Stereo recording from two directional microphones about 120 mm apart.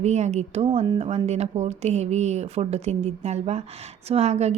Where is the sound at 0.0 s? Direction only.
70° right (ahead or behind).